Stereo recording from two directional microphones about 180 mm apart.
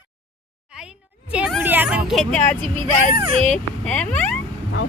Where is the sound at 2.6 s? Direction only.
45° left (ahead or behind).